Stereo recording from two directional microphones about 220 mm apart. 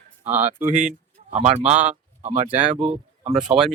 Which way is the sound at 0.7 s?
35° right (ahead or behind).